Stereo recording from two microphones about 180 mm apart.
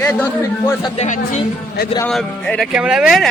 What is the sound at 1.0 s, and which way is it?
Speech, 40° left (ahead or behind).